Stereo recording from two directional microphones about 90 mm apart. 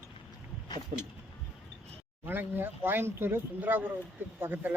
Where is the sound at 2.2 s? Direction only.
25° right (ahead or behind).